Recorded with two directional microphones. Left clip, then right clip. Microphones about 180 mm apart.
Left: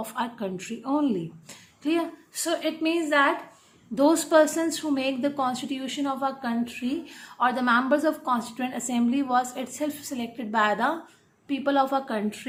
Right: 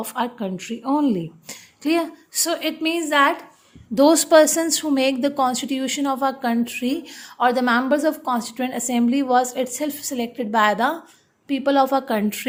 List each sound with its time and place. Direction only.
0.0 s a woman's voice: 30° right (ahead or behind)
3.9 s a woman's voice: 35° right (ahead or behind)